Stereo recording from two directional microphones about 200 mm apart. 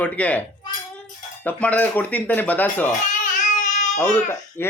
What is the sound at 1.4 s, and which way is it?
Speech, 5° left (ahead or behind).